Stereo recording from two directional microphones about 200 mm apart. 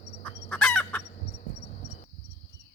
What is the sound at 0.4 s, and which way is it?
Chicken, 5° left (ahead or behind).